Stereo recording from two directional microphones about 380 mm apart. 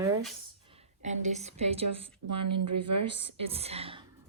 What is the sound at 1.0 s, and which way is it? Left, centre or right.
Speech, centre.